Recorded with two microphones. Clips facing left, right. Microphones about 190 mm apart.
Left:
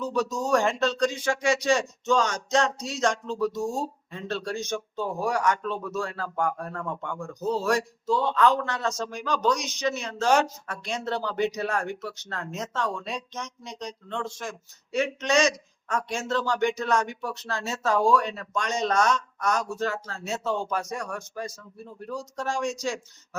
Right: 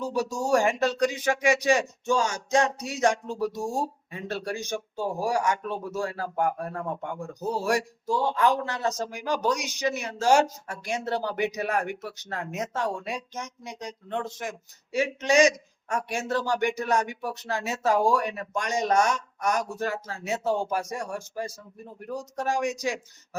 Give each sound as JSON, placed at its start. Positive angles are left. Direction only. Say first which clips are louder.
{"t": 0.1, "sound": "speech", "louder": "even", "side_deg": -10}
{"t": 5.1, "sound": "speech", "louder": "even", "side_deg": -30}
{"t": 5.5, "sound": "speech", "louder": "left 1 dB", "side_deg": -15}
{"t": 20.8, "sound": "speech", "louder": "even", "side_deg": -30}
{"t": 22.4, "sound": "speech", "louder": "right 1 dB", "side_deg": -15}